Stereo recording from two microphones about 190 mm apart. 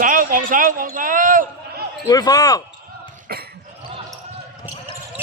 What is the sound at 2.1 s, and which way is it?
Speech, 20° left (ahead or behind).